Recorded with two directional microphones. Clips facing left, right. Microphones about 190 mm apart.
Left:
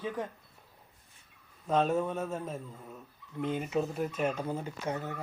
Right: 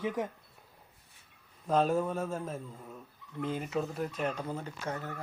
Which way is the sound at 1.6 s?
Centre (ahead or behind).